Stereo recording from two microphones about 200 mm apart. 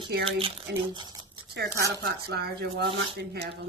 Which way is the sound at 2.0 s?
55° right (ahead or behind).